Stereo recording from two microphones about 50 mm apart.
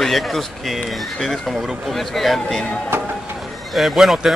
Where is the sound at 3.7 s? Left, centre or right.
Centre.